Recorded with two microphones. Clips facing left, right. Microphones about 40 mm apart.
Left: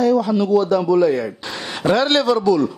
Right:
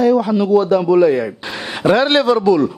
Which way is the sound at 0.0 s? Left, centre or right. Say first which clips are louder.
Right 3 dB; centre.